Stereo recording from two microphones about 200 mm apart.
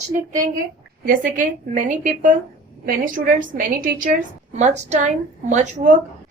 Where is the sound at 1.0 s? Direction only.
45° right (ahead or behind).